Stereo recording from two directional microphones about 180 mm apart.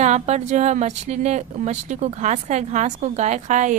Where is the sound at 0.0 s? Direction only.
40° right (ahead or behind).